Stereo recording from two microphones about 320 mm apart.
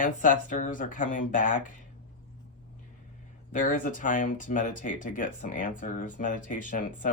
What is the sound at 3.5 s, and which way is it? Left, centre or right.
Speech, left.